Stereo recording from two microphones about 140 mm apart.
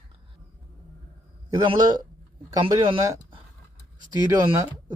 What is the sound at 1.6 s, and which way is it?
A man's voice, 30° right (ahead or behind).